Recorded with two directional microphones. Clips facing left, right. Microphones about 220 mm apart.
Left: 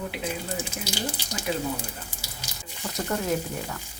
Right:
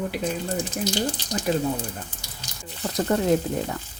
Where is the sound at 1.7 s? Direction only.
10° left (ahead or behind).